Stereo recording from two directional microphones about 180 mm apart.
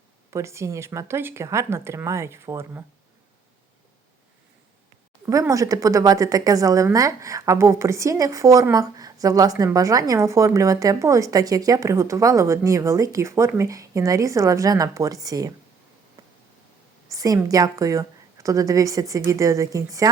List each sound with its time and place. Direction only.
0.3 s a woman's voice: 15° right (ahead or behind)
5.2 s a woman's voice: 20° right (ahead or behind)
17.1 s a woman's voice: 20° right (ahead or behind)